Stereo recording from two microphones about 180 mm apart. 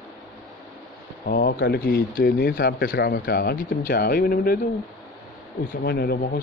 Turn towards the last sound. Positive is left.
turn(degrees=60)  # may be behind; listen again after turning